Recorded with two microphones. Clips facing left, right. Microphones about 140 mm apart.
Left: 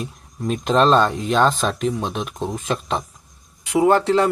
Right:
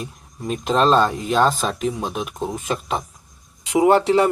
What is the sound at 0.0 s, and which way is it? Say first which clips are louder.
Speech: left 3 dB; centre (ahead or behind).